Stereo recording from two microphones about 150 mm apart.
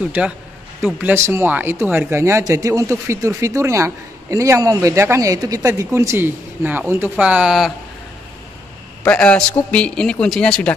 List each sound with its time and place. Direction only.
0.2 s a man's voice: 10° right (ahead or behind)
9.0 s a man's voice: 10° left (ahead or behind)